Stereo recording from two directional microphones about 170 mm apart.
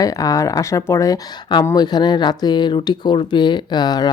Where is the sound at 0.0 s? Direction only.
20° left (ahead or behind).